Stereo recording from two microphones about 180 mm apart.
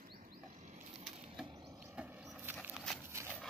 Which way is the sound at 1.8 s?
10° right (ahead or behind).